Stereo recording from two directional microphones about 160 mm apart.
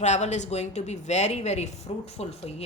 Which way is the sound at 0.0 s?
45° left (ahead or behind).